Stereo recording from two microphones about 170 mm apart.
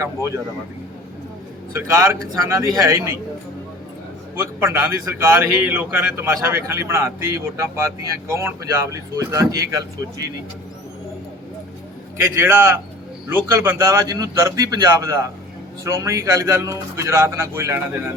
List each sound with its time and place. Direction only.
1.7 s a man's voice: 15° right (ahead or behind)
4.4 s a man's voice: 15° right (ahead or behind)
12.1 s a man's voice: 15° right (ahead or behind)